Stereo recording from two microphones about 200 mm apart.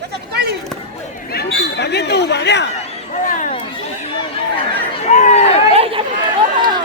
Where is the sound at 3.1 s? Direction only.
40° left (ahead or behind).